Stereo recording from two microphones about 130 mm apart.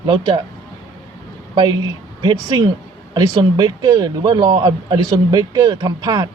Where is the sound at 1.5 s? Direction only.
35° right (ahead or behind).